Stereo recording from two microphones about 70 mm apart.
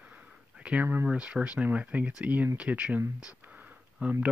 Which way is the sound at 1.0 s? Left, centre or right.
Centre.